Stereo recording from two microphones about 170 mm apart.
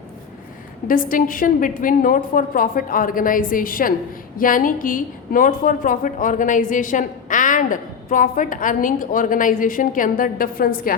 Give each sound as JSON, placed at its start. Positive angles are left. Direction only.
{"t": 0.9, "sound": "a woman's voice", "side_deg": 55}